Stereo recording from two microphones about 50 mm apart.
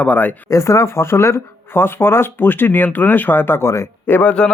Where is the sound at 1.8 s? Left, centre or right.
Left.